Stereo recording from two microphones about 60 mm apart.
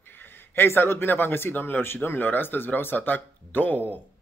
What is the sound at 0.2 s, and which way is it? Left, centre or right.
Speech, left.